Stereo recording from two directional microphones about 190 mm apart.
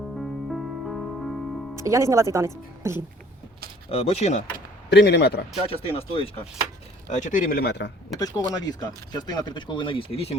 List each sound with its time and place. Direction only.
0.2 s music: centre (ahead or behind)
1.7 s speech: 15° right (ahead or behind)
3.9 s speech: 30° left (ahead or behind)
4.9 s a man's voice: 65° left (ahead or behind)
5.6 s speech: 30° left (ahead or behind)
7.1 s speech: 40° left (ahead or behind); by 7.9 s 65° left (ahead or behind)
8.1 s speech: 20° left (ahead or behind)